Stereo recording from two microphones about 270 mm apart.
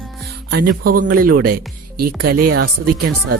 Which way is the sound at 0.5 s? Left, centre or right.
Right.